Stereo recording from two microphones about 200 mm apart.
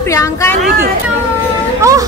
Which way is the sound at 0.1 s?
15° left (ahead or behind).